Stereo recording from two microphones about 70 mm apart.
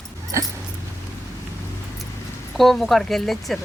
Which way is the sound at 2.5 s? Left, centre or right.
Centre.